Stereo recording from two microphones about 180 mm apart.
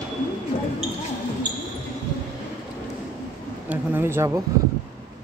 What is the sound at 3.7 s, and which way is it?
Speech, 15° right (ahead or behind).